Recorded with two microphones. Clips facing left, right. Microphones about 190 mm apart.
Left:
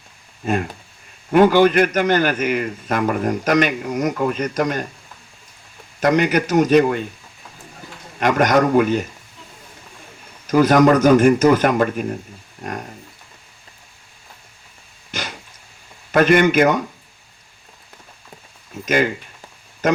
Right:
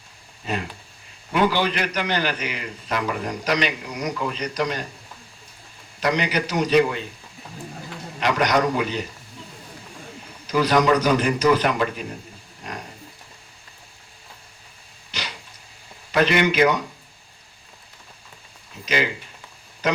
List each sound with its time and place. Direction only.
0.4 s a man's voice: 50° left (ahead or behind)
6.0 s a man's voice: 50° left (ahead or behind)
8.2 s a man's voice: 50° left (ahead or behind)
10.4 s a man's voice: 50° left (ahead or behind)
15.1 s a sound: 50° left (ahead or behind)
16.1 s a man's voice: 50° left (ahead or behind)
18.7 s a man's voice: 50° left (ahead or behind)